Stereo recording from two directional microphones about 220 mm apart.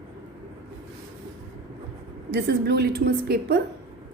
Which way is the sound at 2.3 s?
45° right (ahead or behind).